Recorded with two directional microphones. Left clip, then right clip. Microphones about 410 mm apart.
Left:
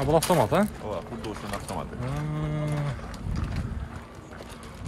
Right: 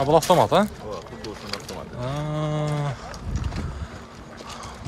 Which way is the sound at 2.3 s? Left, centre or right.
Centre.